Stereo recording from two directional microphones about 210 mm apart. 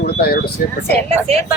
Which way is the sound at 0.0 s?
50° left (ahead or behind).